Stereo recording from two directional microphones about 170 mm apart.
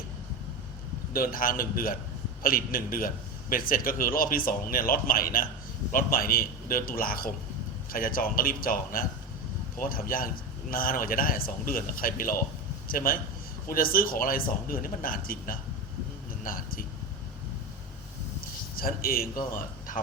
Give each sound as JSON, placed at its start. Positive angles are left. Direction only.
{"t": 1.1, "sound": "a man's voice", "side_deg": 55}
{"t": 18.8, "sound": "a man's voice", "side_deg": 60}